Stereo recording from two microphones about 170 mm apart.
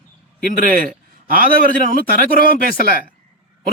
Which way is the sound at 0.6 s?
55° right (ahead or behind).